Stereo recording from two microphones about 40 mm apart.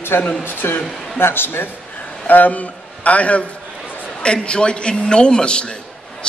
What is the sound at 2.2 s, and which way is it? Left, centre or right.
A man's voice, left.